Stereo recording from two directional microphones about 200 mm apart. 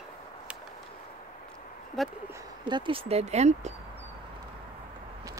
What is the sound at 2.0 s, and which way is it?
Speech, centre (ahead or behind).